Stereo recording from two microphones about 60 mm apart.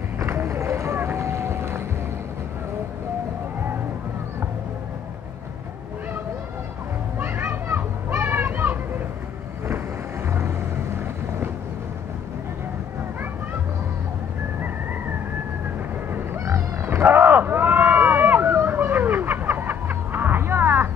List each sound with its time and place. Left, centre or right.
0.9 s boat: right
7.2 s children playing: right
7.6 s children playing: right
8.2 s children playing: right
16.4 s a sound: right